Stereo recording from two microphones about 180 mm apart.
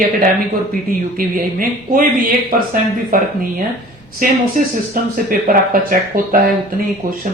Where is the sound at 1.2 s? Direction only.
50° right (ahead or behind).